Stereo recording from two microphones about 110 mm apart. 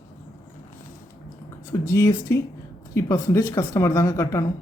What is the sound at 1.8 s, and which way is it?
Speech, 25° left (ahead or behind).